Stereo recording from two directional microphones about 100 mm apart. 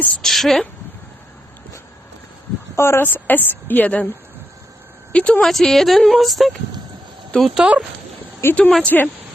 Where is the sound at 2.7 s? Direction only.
25° left (ahead or behind).